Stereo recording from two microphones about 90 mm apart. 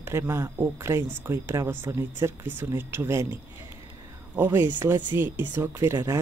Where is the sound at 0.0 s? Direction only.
30° right (ahead or behind).